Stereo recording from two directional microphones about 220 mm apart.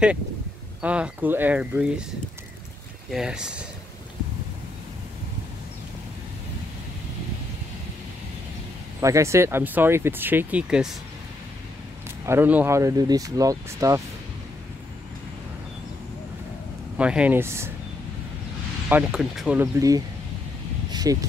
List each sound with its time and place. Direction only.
0.8 s speech: 5° right (ahead or behind)
9.0 s speech: 15° right (ahead or behind)
12.3 s speech: 10° right (ahead or behind)
16.9 s speech: 5° right (ahead or behind)
18.9 s speech: 5° right (ahead or behind)